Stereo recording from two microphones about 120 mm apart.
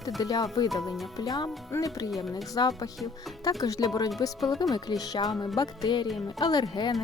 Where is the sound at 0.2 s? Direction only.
30° left (ahead or behind).